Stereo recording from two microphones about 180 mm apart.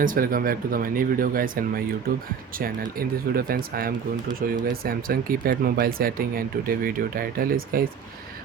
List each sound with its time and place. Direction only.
0.0 s speech: 50° right (ahead or behind)